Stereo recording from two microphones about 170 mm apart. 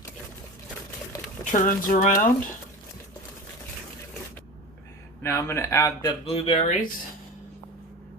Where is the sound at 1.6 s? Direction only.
50° left (ahead or behind).